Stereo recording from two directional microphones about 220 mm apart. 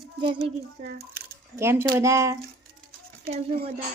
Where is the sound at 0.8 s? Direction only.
45° right (ahead or behind).